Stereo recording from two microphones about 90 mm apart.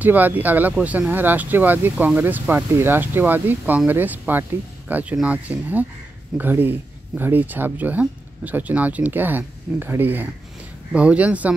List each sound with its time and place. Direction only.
0.0 s speech: 20° right (ahead or behind)